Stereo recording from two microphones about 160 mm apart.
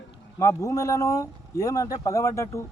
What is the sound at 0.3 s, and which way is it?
Speech, 20° left (ahead or behind).